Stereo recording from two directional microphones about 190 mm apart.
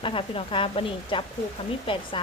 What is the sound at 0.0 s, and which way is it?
Speech, 30° left (ahead or behind).